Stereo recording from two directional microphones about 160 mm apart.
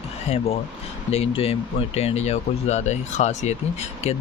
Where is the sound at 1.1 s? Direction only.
40° left (ahead or behind).